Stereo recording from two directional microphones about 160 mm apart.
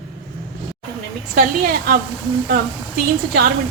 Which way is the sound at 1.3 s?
70° right (ahead or behind).